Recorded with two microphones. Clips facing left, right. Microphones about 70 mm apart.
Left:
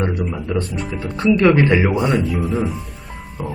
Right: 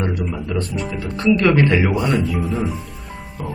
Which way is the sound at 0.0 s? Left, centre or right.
Centre.